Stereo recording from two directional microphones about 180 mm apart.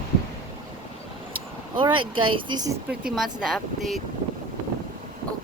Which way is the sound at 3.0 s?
5° right (ahead or behind).